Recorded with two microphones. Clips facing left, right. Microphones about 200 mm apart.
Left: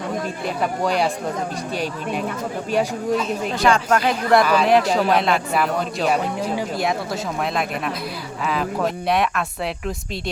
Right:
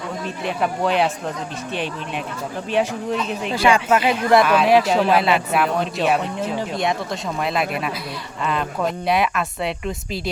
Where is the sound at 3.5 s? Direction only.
5° right (ahead or behind).